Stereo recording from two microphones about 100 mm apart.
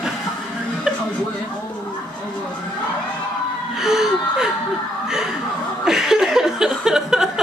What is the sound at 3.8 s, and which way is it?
Gasp, 5° right (ahead or behind).